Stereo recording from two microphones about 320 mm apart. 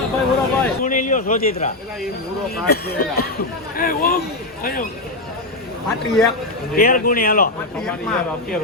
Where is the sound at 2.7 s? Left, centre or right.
Left.